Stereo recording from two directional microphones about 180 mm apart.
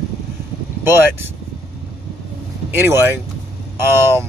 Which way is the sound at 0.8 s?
10° right (ahead or behind).